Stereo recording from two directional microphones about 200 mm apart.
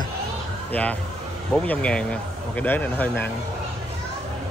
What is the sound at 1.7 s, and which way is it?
A man's voice, 5° left (ahead or behind).